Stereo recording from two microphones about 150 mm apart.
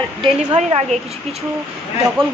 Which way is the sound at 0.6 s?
45° right (ahead or behind).